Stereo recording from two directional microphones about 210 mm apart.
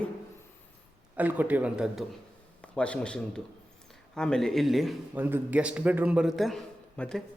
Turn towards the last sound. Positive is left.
turn(degrees=0)  # may be behind; listen again after turning